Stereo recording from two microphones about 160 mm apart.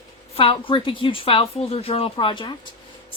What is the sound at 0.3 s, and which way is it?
A woman's voice, 35° left (ahead or behind).